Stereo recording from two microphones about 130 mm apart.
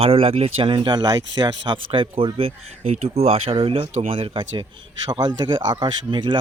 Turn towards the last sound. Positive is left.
turn(degrees=-35)  # may be behind; listen again after turning